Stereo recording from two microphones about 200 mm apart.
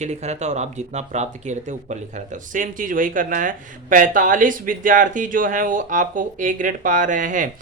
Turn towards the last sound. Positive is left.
turn(degrees=-40)  # may be behind; listen again after turning